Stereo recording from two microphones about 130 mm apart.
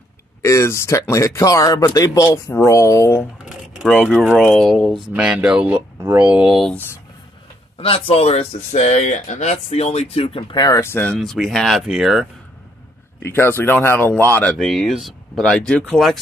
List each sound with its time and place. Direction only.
0.4 s speech: 20° left (ahead or behind)
4.0 s speech: 5° right (ahead or behind)
6.7 s speech: 15° left (ahead or behind)
7.7 s speech: 45° left (ahead or behind)
10.8 s speech: 15° left (ahead or behind)
11.1 s speech: centre (ahead or behind)
13.2 s speech: 20° left (ahead or behind); by 16.2 s centre (ahead or behind)